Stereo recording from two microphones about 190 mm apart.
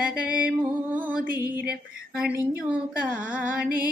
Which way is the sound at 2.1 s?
10° right (ahead or behind).